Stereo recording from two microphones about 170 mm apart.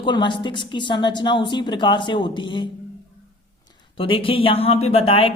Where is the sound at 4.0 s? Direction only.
30° left (ahead or behind).